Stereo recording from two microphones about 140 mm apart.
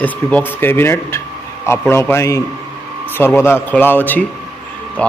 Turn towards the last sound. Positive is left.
turn(degrees=10)  # may be behind; listen again after turning